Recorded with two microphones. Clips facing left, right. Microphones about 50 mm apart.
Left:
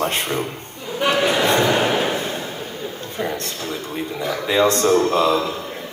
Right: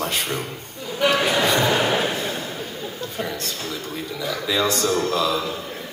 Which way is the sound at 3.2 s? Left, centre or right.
Left.